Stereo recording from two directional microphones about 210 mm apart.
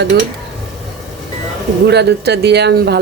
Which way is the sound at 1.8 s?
50° right (ahead or behind).